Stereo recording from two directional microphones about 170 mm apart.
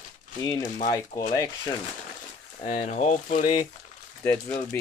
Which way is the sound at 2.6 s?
45° left (ahead or behind).